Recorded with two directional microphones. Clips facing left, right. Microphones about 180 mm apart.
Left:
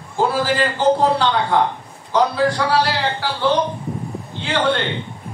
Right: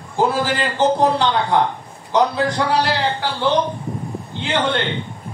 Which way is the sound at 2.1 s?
20° right (ahead or behind).